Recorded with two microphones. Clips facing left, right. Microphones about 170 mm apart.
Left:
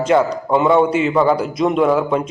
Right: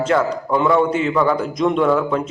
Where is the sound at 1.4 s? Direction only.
10° left (ahead or behind).